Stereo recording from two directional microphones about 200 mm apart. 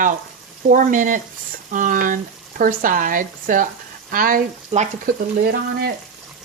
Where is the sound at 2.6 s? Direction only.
45° right (ahead or behind).